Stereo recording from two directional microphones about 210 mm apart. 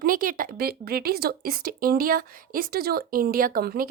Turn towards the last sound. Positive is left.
turn(degrees=-45)  # may be behind; listen again after turning